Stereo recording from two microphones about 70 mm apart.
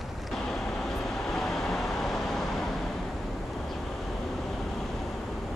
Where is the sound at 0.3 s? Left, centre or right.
Centre.